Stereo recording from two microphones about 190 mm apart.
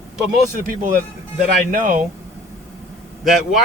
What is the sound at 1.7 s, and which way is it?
Speech, 45° right (ahead or behind).